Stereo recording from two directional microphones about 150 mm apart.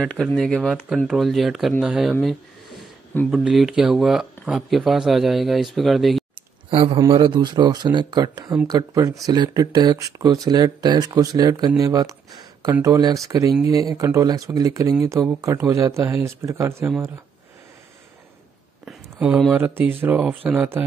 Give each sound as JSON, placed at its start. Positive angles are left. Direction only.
{"t": 0.0, "sound": "a man's voice", "side_deg": 5}
{"t": 3.3, "sound": "a man's voice", "side_deg": -5}
{"t": 6.3, "sound": "a sound", "side_deg": -35}
{"t": 7.1, "sound": "speech", "side_deg": -35}
{"t": 18.9, "sound": "a sound", "side_deg": -5}
{"t": 19.5, "sound": "speech", "side_deg": -15}